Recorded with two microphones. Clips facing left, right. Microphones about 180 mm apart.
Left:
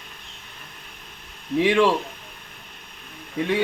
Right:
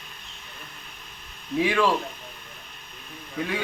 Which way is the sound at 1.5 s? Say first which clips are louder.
Left 4 dB; 25° left (ahead or behind).